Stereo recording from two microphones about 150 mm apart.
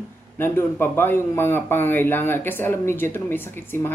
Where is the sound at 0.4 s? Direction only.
15° left (ahead or behind).